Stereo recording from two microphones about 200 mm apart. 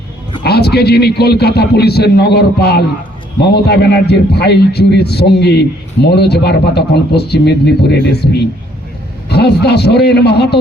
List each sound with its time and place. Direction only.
0.4 s a man's voice: 55° left (ahead or behind)